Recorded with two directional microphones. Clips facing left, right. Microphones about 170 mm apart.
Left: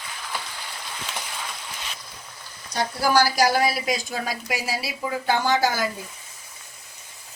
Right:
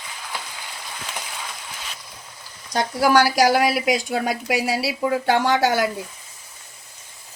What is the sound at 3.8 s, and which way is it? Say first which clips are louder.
Speech: right 5 dB; 75° right (ahead or behind).